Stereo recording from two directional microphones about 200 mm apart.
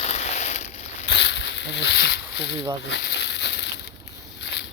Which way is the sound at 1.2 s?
60° left (ahead or behind).